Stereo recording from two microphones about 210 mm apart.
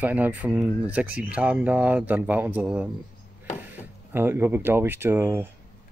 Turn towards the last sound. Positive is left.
turn(degrees=-10)  # may be behind; listen again after turning